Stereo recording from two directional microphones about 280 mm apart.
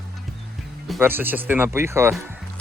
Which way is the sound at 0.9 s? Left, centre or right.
Centre.